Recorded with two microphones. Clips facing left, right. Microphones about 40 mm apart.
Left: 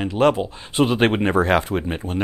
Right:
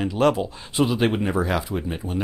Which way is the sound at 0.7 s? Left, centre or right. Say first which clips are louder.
Left 3 dB; left.